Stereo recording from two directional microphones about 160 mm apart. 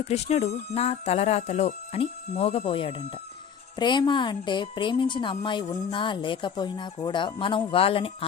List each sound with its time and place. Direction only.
0.1 s a woman's voice: 40° left (ahead or behind)